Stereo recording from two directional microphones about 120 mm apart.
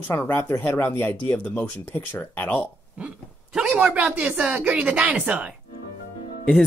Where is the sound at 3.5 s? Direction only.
5° right (ahead or behind).